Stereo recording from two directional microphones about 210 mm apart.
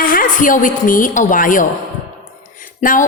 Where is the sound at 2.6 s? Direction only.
40° left (ahead or behind).